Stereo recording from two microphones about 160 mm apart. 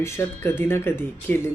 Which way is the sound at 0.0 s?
15° left (ahead or behind).